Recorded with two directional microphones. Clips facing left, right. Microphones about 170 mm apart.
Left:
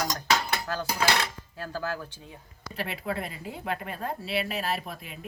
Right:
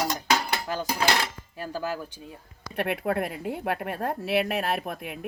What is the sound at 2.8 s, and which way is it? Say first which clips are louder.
Speech: right 6 dB; 60° right (ahead or behind).